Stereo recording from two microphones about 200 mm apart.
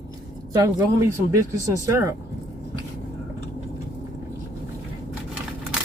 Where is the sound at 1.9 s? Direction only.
15° right (ahead or behind).